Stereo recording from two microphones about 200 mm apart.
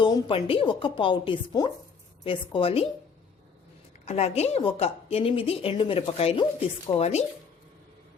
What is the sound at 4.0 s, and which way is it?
A woman's voice, 35° left (ahead or behind).